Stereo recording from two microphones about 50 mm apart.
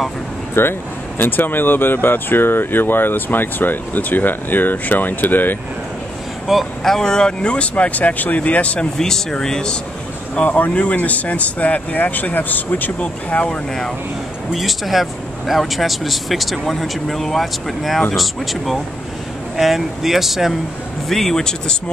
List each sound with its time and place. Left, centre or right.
0.6 s speech: left
6.8 s speech: centre; by 8.8 s left
8.9 s speech: centre
10.3 s speech: left
13.0 s speech: left
14.5 s speech: centre
21.1 s speech: centre